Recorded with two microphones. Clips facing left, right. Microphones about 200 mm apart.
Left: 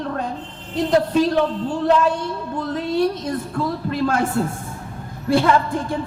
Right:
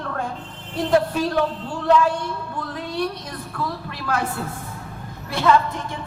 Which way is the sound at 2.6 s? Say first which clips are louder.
Left 7 dB; 25° left (ahead or behind).